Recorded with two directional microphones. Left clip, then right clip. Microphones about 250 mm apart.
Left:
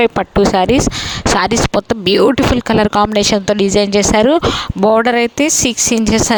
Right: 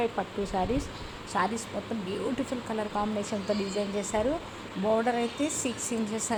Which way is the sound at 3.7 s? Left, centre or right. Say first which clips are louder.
Left 19 dB; left.